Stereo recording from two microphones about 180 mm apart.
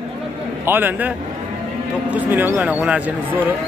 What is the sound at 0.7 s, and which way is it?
Speech, 10° right (ahead or behind).